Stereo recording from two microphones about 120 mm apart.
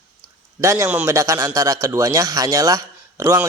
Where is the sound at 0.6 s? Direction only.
25° right (ahead or behind).